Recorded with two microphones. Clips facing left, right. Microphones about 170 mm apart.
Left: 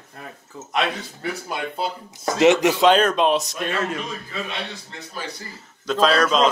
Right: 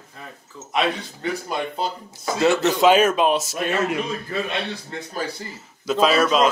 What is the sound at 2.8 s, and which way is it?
Speech, 5° right (ahead or behind).